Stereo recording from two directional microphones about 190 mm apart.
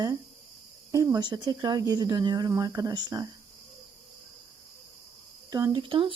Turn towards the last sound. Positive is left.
turn(degrees=-25)  # may be behind; listen again after turning